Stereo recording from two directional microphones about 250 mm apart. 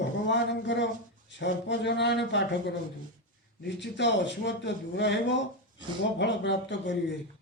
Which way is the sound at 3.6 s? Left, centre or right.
Left.